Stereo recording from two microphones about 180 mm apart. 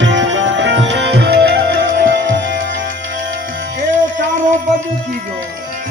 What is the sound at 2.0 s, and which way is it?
Music, 90° right.